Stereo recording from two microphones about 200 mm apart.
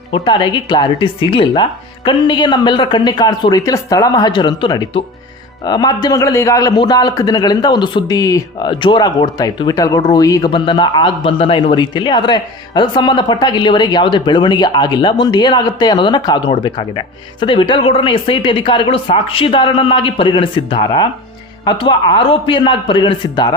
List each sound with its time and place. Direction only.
0.1 s speech: 25° left (ahead or behind)